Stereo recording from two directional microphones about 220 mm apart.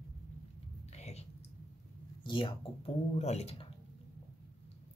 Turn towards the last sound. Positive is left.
turn(degrees=30)  # may be behind; listen again after turning